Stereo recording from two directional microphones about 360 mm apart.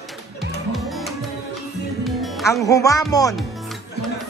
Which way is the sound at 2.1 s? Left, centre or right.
Centre.